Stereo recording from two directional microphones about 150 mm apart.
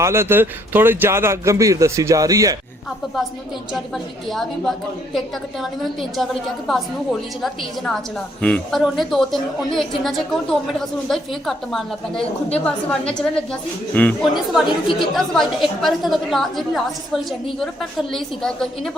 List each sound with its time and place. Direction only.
0.0 s speech: 15° right (ahead or behind)
3.7 s a woman's voice: centre (ahead or behind)